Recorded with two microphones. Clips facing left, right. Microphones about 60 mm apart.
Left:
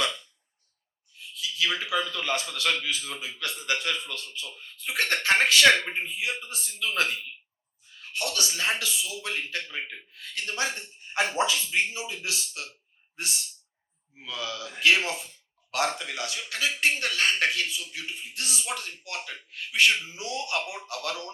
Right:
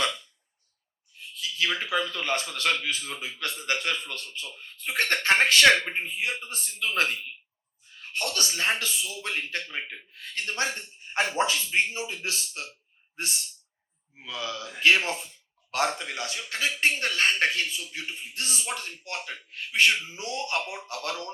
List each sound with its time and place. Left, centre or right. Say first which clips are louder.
1.4 s a man's voice: even; right